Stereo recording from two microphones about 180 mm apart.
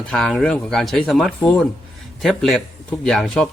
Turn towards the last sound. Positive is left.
turn(degrees=5)  # may be behind; listen again after turning